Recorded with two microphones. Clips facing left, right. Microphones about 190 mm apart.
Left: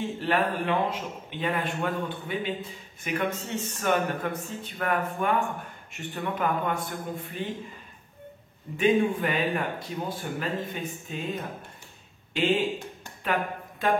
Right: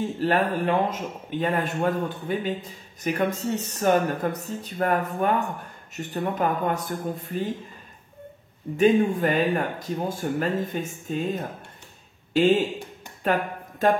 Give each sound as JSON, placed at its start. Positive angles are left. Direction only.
{"t": 0.0, "sound": "a man's voice", "side_deg": -40}
{"t": 8.7, "sound": "speech", "side_deg": -40}
{"t": 12.4, "sound": "a man's voice", "side_deg": -40}
{"t": 13.2, "sound": "a sound", "side_deg": -45}